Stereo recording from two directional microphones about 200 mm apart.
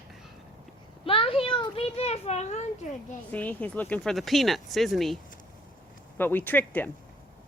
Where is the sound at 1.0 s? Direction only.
25° left (ahead or behind).